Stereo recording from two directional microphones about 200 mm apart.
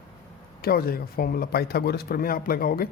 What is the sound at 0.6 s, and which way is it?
A man's voice, 50° left (ahead or behind).